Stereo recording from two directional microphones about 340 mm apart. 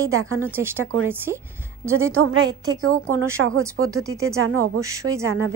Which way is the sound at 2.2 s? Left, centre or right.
Right.